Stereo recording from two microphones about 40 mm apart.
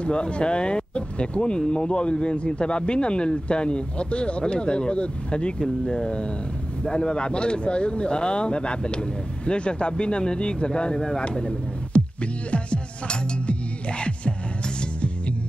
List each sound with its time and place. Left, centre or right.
0.0 s a man's voice: left
12.4 s music: left